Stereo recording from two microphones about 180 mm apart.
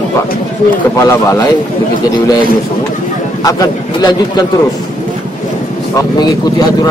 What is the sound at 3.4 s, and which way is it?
A man's voice, 20° left (ahead or behind).